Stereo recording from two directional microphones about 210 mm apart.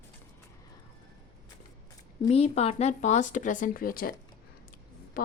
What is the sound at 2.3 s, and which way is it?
Speech, 30° left (ahead or behind).